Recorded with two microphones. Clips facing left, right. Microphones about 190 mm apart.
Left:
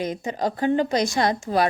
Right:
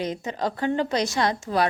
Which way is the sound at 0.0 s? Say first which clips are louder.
Left 2 dB; 15° left (ahead or behind).